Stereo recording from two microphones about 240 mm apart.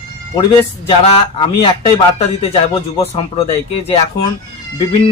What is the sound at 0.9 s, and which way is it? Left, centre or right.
Speech, left.